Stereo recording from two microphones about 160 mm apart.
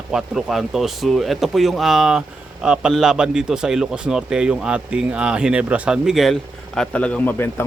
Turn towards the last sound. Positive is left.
turn(degrees=15)  # may be behind; listen again after turning